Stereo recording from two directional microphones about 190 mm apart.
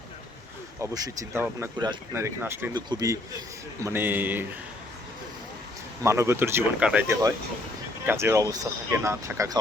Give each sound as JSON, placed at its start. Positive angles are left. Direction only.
{"t": 0.8, "sound": "speech", "side_deg": -15}
{"t": 6.0, "sound": "speech", "side_deg": -15}